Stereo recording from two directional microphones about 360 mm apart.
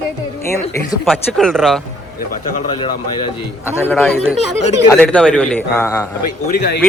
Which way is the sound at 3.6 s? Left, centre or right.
Centre.